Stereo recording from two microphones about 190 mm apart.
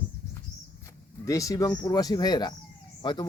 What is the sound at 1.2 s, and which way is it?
Speech, 15° left (ahead or behind).